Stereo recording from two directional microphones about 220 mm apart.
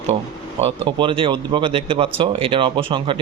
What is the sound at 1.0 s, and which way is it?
Speech, 25° right (ahead or behind).